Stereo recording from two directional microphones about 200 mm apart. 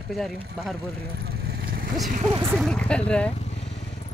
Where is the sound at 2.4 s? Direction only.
10° right (ahead or behind).